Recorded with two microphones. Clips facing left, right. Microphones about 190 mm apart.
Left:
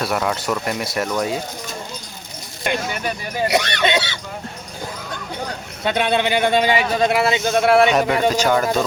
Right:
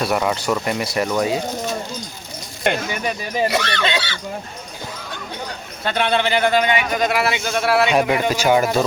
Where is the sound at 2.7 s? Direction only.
60° right (ahead or behind).